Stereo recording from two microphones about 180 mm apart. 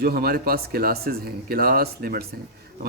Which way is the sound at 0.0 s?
55° right (ahead or behind).